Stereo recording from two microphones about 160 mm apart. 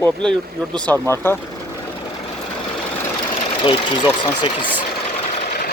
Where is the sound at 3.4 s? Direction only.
30° left (ahead or behind).